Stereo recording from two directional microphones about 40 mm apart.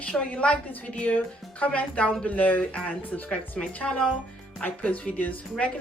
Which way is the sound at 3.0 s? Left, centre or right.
Left.